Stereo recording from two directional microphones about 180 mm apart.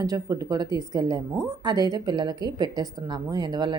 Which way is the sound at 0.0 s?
20° right (ahead or behind).